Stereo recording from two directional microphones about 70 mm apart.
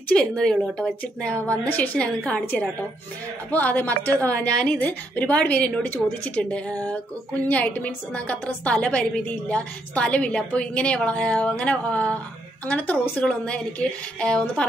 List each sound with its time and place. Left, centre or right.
0.1 s a woman's voice: centre
4.5 s a woman's voice: centre
4.7 s a woman's voice: left
13.2 s a woman's voice: centre